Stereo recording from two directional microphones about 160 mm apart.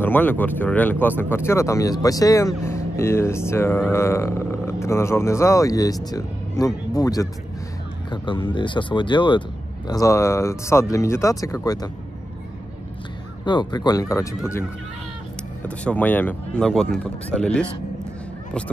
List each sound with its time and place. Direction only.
0.0 s speech: 10° left (ahead or behind)
13.5 s speech: 25° left (ahead or behind); by 17.6 s 5° left (ahead or behind)